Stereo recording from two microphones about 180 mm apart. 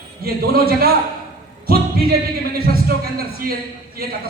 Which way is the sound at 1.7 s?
55° right (ahead or behind).